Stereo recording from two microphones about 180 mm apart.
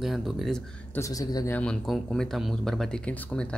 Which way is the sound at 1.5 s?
5° left (ahead or behind).